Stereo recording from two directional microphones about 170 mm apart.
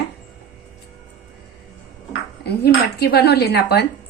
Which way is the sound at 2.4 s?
70° left (ahead or behind).